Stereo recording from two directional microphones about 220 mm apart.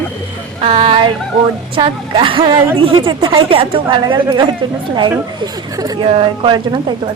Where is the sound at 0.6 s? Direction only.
25° right (ahead or behind).